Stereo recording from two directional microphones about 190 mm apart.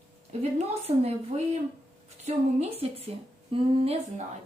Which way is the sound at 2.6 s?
30° right (ahead or behind).